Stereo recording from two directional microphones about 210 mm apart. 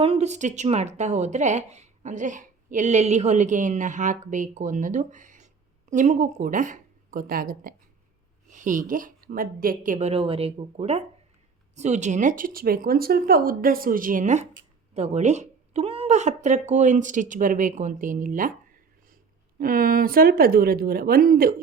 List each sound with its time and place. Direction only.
0.0 s a woman's voice: 30° right (ahead or behind)
19.5 s speech: 45° right (ahead or behind)